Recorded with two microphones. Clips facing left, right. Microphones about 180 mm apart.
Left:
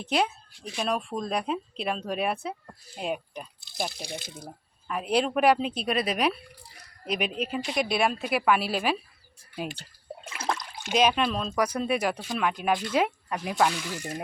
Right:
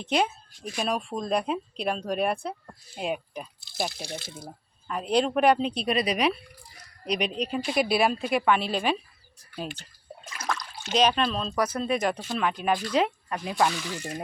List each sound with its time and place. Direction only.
0.0 s speech: centre (ahead or behind)
4.0 s speech: 15° left (ahead or behind)
10.2 s water: 30° left (ahead or behind)
10.8 s speech: 10° left (ahead or behind)